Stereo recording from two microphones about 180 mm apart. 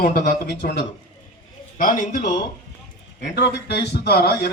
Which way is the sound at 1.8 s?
50° left (ahead or behind).